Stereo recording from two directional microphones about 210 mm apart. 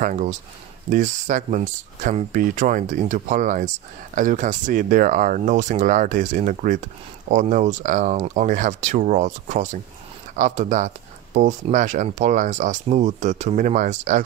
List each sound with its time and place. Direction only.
0.0 s speech: 35° right (ahead or behind)